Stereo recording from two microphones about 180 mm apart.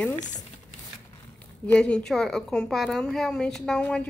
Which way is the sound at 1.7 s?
5° left (ahead or behind).